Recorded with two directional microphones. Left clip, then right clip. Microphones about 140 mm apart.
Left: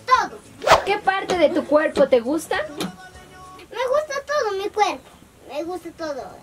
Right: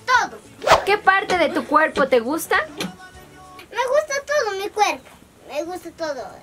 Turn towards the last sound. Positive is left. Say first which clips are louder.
# right 2 dB
turn(degrees=-5)  # may be behind; listen again after turning